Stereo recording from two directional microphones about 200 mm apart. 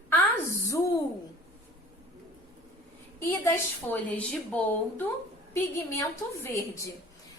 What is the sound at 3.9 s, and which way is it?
A woman's voice, 10° left (ahead or behind).